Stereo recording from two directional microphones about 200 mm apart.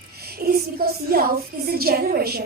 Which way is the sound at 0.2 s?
50° right (ahead or behind).